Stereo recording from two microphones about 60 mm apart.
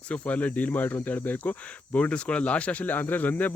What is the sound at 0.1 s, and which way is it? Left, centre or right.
Speech, left.